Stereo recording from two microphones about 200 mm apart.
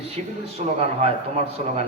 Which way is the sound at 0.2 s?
35° right (ahead or behind).